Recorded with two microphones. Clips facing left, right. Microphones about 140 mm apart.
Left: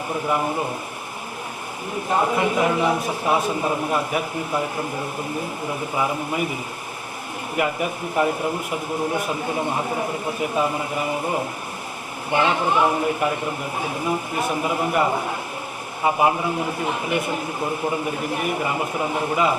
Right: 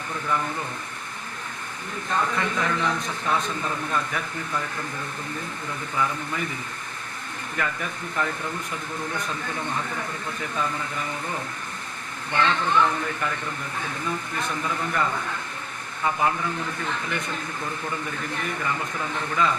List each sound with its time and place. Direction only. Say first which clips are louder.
2.0 s speech: left 5 dB; 20° left (ahead or behind)
4.5 s speech: left 6 dB; 25° left (ahead or behind)
5.9 s speech: left 2 dB; 20° left (ahead or behind)
7.5 s speech: left 7 dB; 15° left (ahead or behind)
9.9 s speech: left 7 dB; 25° left (ahead or behind)
10.4 s speech: left 6 dB; 15° left (ahead or behind)